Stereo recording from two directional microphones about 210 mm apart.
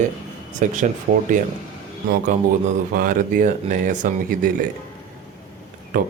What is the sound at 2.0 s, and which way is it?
Speech, 35° right (ahead or behind).